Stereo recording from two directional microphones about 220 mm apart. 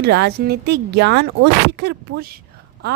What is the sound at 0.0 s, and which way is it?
Speech, 50° right (ahead or behind).